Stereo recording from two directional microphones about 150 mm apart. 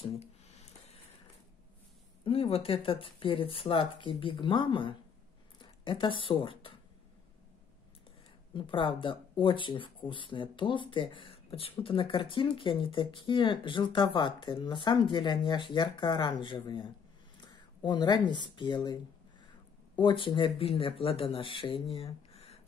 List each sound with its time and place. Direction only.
2.2 s speech: 40° left (ahead or behind)
8.5 s speech: 35° left (ahead or behind)
20.0 s speech: 30° left (ahead or behind)
21.9 s a sound: 40° left (ahead or behind)